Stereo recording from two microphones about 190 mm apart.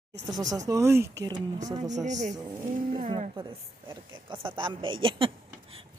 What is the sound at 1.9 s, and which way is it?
Speech, 40° right (ahead or behind).